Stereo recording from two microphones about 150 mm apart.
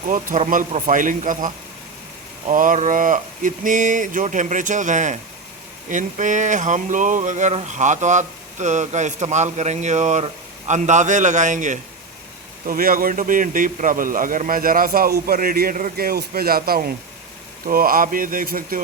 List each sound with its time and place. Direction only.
0.1 s speech: 60° right (ahead or behind)
12.6 s a man's voice: 70° right (ahead or behind)